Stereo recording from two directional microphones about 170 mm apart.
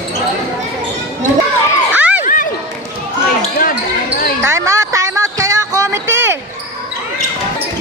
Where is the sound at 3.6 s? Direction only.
55° left (ahead or behind).